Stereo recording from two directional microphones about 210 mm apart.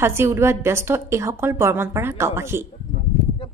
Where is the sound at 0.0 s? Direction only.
10° right (ahead or behind).